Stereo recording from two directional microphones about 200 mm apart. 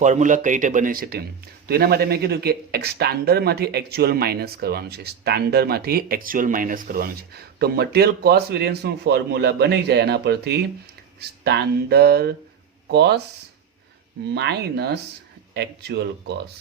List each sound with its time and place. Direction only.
0.0 s a man's voice: 35° right (ahead or behind); by 13.2 s 55° right (ahead or behind)
14.3 s speech: 55° right (ahead or behind)